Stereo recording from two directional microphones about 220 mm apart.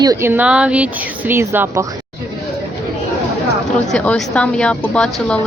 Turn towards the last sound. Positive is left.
turn(degrees=5)  # may be behind; listen again after turning